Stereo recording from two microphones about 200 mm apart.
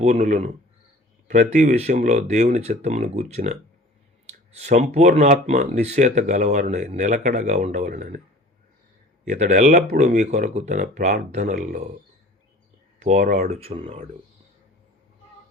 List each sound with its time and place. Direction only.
0.0 s speech: 35° right (ahead or behind)
9.3 s speech: 35° right (ahead or behind)
13.0 s speech: 40° right (ahead or behind)
13.5 s speech: 30° right (ahead or behind)